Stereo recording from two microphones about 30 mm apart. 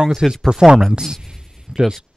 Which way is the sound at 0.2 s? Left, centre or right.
Centre.